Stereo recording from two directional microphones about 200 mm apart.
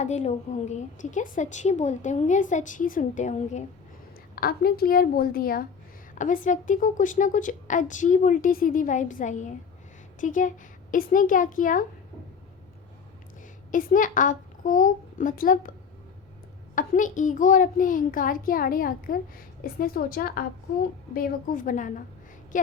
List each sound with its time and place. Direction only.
0.0 s a woman's voice: 35° left (ahead or behind)
4.4 s a child's voice: 50° left (ahead or behind)
13.7 s a child's voice: 40° left (ahead or behind)
16.7 s a child's voice: 40° left (ahead or behind)